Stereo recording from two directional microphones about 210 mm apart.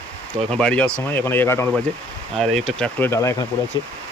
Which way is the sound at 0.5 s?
5° left (ahead or behind).